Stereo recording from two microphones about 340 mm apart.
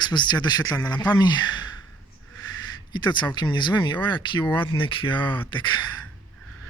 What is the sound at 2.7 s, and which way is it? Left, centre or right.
Speech, centre.